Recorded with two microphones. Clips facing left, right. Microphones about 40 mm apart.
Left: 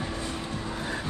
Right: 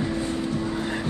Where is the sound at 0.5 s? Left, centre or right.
Right.